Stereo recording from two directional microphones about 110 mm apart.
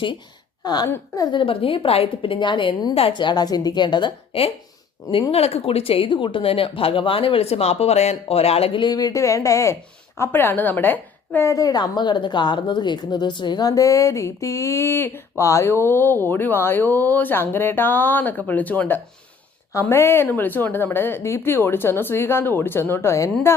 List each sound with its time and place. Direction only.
0.6 s a woman's voice: 40° left (ahead or behind)
1.4 s a woman's voice: 55° left (ahead or behind)
8.8 s a woman's voice: 40° left (ahead or behind); by 11.4 s 15° left (ahead or behind)
11.4 s speech: 35° left (ahead or behind)